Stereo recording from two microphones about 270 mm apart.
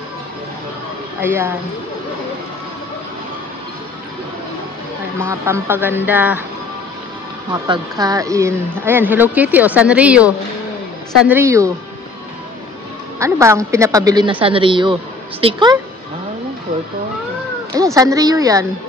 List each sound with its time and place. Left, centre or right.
1.2 s speech: centre
5.2 s speech: centre
7.5 s speech: centre
13.2 s speech: centre
17.9 s speech: centre